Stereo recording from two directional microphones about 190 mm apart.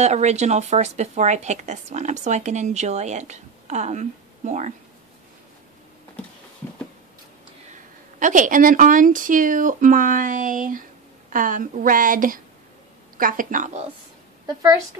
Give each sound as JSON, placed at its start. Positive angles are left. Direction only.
{"t": 0.0, "sound": "speech", "side_deg": -35}
{"t": 7.7, "sound": "a woman's voice", "side_deg": -40}
{"t": 14.4, "sound": "a woman's voice", "side_deg": -15}